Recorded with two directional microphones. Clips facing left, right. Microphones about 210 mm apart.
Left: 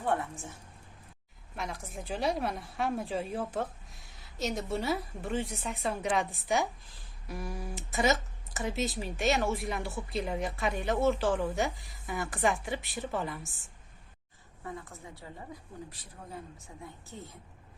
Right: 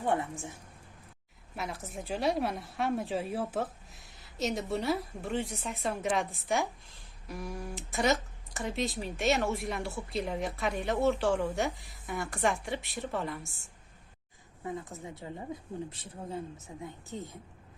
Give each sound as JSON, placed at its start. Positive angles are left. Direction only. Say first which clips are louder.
{"t": 0.0, "sound": "a woman's voice", "louder": "right 1 dB", "side_deg": -15}
{"t": 1.5, "sound": "a woman's voice", "louder": "right 1 dB", "side_deg": -5}
{"t": 14.6, "sound": "speech", "louder": "right 4 dB", "side_deg": -20}